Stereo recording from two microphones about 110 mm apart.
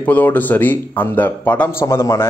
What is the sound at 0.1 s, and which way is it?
A man's voice, 15° left (ahead or behind).